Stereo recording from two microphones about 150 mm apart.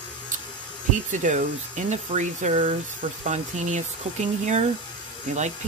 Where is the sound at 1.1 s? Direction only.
55° right (ahead or behind).